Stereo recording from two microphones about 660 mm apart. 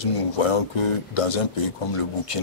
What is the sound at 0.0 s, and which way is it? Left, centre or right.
Speech, left.